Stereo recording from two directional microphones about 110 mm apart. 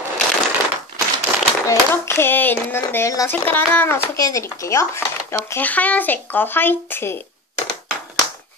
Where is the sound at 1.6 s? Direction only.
25° left (ahead or behind).